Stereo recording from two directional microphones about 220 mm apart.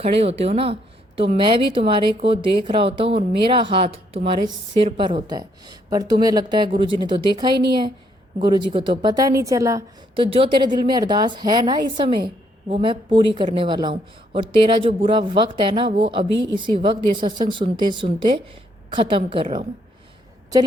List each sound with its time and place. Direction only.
0.0 s a woman's voice: 25° right (ahead or behind)